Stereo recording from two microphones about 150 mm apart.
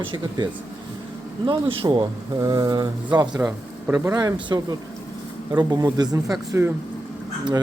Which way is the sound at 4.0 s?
20° right (ahead or behind).